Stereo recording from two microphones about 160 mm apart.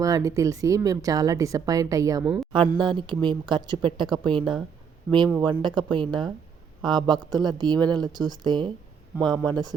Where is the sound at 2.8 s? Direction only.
30° right (ahead or behind).